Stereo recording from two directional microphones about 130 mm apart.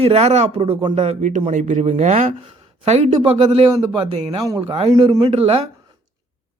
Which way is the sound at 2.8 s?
50° right (ahead or behind).